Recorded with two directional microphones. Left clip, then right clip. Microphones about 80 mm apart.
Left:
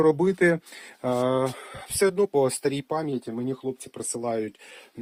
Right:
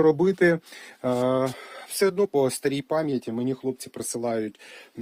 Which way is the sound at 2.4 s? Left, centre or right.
Right.